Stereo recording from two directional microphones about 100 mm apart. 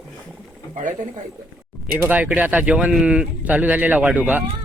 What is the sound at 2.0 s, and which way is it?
Speech, 15° right (ahead or behind).